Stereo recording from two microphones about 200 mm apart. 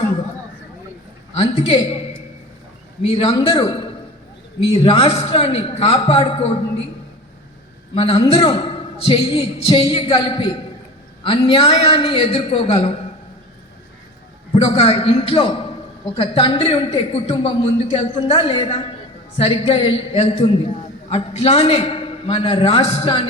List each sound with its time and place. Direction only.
1.4 s a man's voice: 30° left (ahead or behind)
3.1 s a man's voice: 30° left (ahead or behind)
4.8 s a man's voice: 30° left (ahead or behind)
7.9 s a man's voice: 30° left (ahead or behind)
14.5 s a man's voice: 30° left (ahead or behind)